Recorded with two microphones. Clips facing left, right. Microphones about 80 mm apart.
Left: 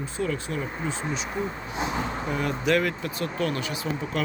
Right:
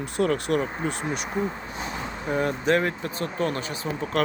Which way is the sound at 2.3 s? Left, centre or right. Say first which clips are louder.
Right 2 dB; right.